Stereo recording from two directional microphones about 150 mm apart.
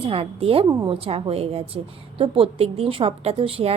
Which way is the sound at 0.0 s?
40° right (ahead or behind).